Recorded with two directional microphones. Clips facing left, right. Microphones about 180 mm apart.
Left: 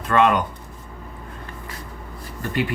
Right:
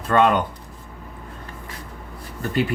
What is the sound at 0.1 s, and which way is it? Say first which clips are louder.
Speech: even; 30° right (ahead or behind).